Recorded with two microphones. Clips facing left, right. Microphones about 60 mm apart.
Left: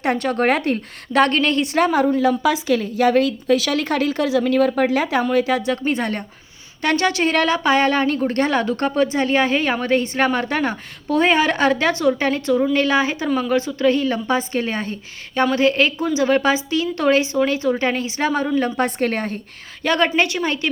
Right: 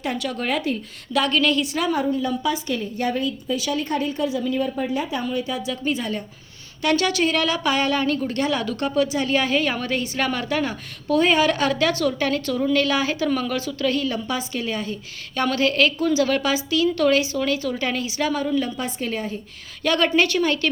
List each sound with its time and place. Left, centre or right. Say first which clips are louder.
0.0 s a woman's voice: left 7 dB; left
2.2 s a woman's voice: left 6 dB; left
5.3 s a woman's voice: left 8 dB; left
6.8 s a woman's voice: left 2 dB; left
15.5 s a woman's voice: left 1 dB; left
18.8 s a woman's voice: left 7 dB; left
19.8 s a woman's voice: left 1 dB; left